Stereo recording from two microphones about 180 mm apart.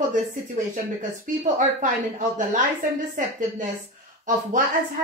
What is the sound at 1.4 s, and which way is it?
Speech, 45° right (ahead or behind).